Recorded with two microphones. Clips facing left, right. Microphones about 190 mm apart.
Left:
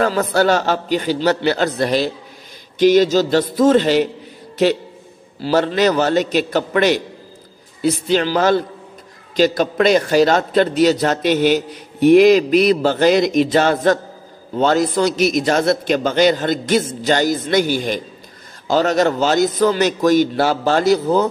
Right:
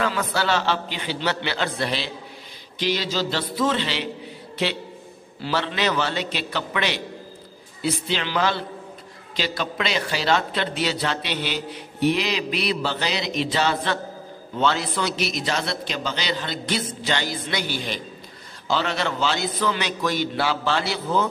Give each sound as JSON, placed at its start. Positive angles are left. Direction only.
{"t": 0.0, "sound": "a man's voice", "side_deg": 40}